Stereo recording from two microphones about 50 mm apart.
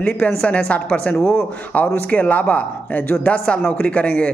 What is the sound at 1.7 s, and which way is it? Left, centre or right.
A man's voice, left.